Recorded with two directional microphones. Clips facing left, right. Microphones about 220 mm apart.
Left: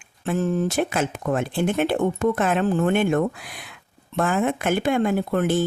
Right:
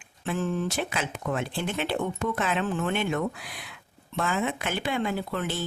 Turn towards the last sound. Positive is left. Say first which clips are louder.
# left 9 dB
turn(degrees=50)  # may be behind; listen again after turning